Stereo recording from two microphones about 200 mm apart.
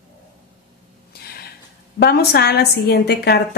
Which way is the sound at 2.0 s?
55° left (ahead or behind).